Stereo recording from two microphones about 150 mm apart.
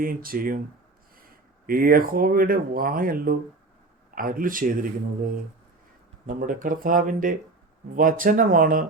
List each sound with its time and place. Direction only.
0.0 s speech: 75° right (ahead or behind)
1.6 s speech: 75° right (ahead or behind)
6.2 s speech: 65° right (ahead or behind)